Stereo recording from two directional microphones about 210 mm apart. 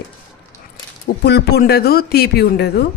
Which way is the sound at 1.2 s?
50° left (ahead or behind).